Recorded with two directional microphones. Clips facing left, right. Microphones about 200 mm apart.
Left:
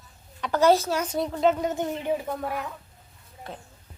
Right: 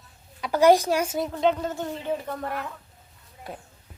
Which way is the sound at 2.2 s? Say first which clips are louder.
Left 1 dB; 5° left (ahead or behind).